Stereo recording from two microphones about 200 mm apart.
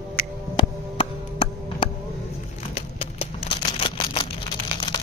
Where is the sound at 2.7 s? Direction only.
30° left (ahead or behind).